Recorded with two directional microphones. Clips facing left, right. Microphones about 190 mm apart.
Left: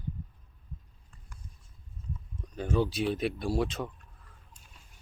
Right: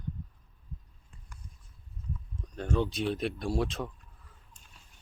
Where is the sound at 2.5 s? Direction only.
5° left (ahead or behind).